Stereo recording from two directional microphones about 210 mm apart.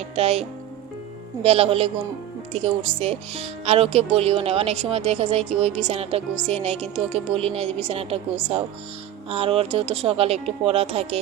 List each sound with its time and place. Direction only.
0.2 s speech: 30° right (ahead or behind)